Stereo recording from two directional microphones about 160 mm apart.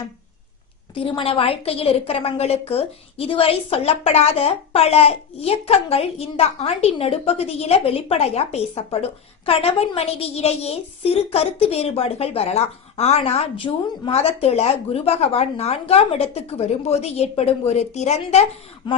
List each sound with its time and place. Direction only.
0.9 s a woman's voice: 35° left (ahead or behind)
18.8 s a woman's voice: 30° left (ahead or behind)